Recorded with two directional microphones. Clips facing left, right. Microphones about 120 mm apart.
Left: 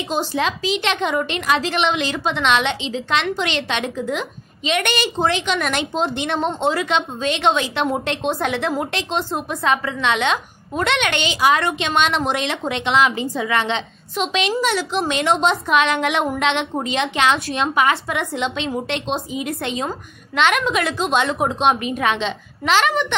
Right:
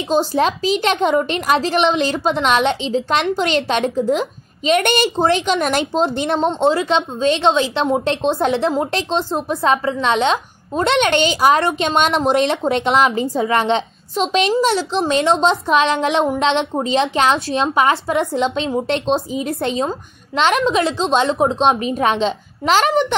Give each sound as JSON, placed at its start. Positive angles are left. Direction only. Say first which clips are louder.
{"t": 0.1, "sound": "a woman's voice", "louder": "right 6 dB", "side_deg": -40}